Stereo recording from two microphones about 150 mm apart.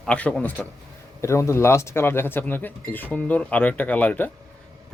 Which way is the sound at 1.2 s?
20° left (ahead or behind).